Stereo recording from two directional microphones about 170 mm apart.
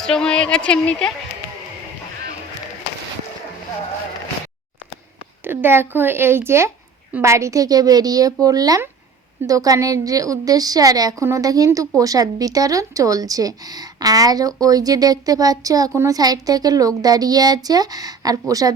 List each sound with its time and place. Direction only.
0.0 s speech: 5° left (ahead or behind)
5.5 s a woman's voice: 15° right (ahead or behind)